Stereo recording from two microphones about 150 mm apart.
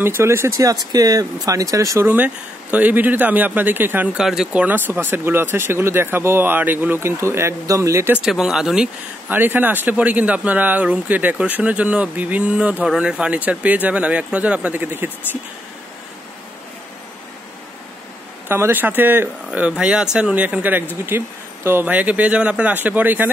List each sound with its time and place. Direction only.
0.0 s speech: 15° right (ahead or behind)
8.2 s speech: 5° right (ahead or behind)
18.5 s speech: 15° right (ahead or behind)